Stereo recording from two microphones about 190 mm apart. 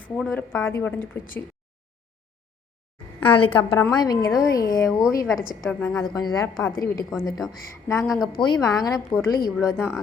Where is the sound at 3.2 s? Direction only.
25° left (ahead or behind).